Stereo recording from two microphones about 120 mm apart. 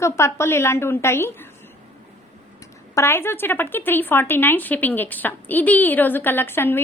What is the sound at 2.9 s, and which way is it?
Speech, 20° left (ahead or behind).